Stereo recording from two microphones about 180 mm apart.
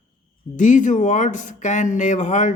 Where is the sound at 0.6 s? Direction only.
45° left (ahead or behind).